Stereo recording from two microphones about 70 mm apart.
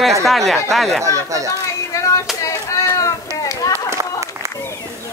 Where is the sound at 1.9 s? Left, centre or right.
Left.